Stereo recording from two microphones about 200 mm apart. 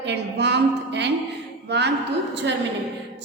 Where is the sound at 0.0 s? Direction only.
60° right (ahead or behind).